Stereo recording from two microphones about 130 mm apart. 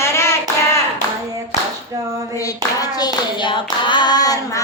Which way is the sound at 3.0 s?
35° left (ahead or behind).